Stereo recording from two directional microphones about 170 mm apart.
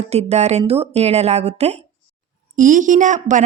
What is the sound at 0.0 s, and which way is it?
Speech, 40° right (ahead or behind).